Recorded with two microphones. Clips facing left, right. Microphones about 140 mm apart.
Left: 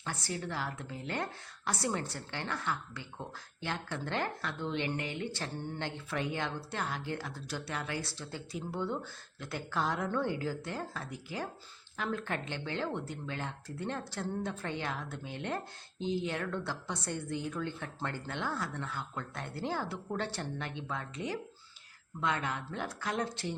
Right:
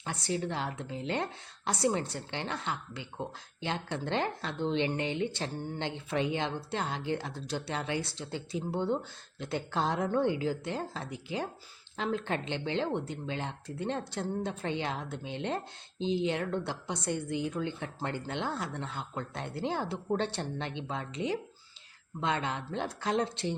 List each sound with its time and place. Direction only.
0.0 s speech: 20° right (ahead or behind)